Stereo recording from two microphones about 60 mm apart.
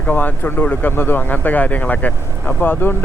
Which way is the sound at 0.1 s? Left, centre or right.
Left.